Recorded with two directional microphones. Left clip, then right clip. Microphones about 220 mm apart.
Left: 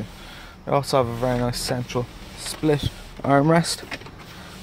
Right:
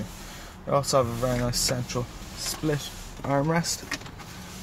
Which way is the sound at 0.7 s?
20° left (ahead or behind).